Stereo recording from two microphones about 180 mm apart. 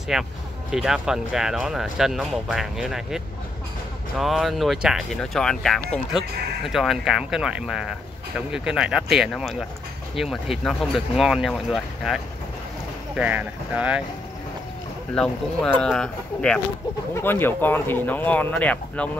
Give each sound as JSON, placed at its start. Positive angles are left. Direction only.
{"t": 0.1, "sound": "speech", "side_deg": 0}
{"t": 4.2, "sound": "speech", "side_deg": 0}
{"t": 15.1, "sound": "speech", "side_deg": 5}